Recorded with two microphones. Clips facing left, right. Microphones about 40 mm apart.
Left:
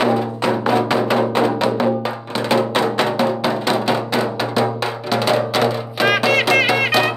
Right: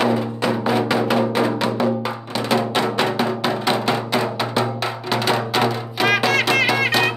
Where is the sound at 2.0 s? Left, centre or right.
Centre.